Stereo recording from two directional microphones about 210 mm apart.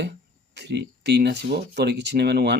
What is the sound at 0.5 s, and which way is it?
Speech, 55° right (ahead or behind).